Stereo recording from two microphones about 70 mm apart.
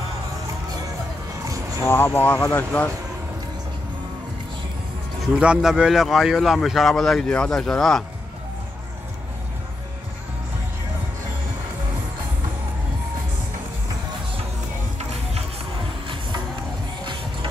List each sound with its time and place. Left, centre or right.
1.9 s speech: left
5.4 s speech: centre